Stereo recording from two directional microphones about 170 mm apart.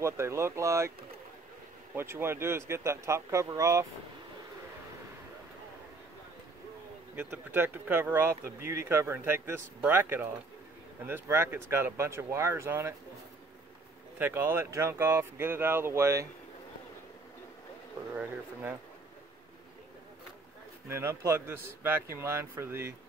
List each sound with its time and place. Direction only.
0.0 s a sound: 15° right (ahead or behind)
2.0 s speech: 15° right (ahead or behind)
7.2 s speech: 15° right (ahead or behind)
14.1 s speech: 10° right (ahead or behind)
18.1 s speech: 10° right (ahead or behind)
20.9 s speech: 15° right (ahead or behind)